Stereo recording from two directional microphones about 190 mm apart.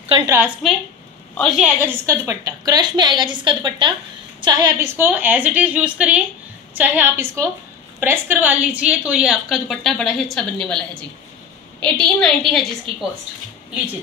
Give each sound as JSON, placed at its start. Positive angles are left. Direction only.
{"t": 0.0, "sound": "a sound", "side_deg": -30}
{"t": 0.6, "sound": "a woman's voice", "side_deg": 0}
{"t": 1.6, "sound": "a woman's voice", "side_deg": -10}